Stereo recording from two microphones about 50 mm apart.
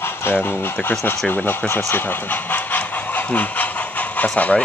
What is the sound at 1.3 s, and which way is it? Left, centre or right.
Speech, left.